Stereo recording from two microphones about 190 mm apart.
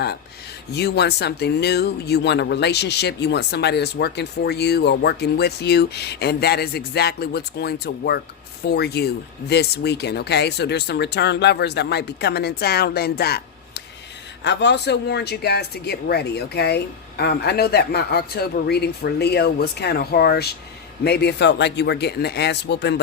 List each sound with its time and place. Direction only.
0.7 s speech: 60° left (ahead or behind)